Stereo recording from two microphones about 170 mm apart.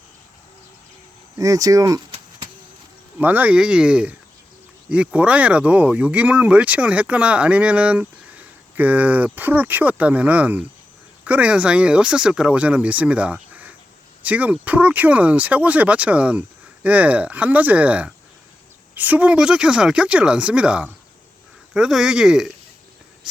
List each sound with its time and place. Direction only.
1.4 s speech: 20° right (ahead or behind)
3.2 s speech: 10° right (ahead or behind)